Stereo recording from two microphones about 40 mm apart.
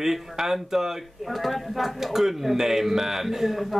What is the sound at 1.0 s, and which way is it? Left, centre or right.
Speech, centre.